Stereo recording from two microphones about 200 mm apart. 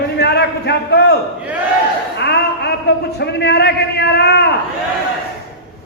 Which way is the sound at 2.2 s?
55° left (ahead or behind).